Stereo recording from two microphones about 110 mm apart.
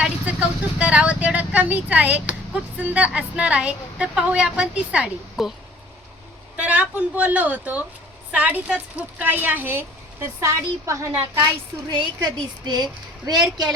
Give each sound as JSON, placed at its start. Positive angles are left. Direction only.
{"t": 0.0, "sound": "speech", "side_deg": -15}
{"t": 6.6, "sound": "speech", "side_deg": -15}
{"t": 11.9, "sound": "a woman's voice", "side_deg": -40}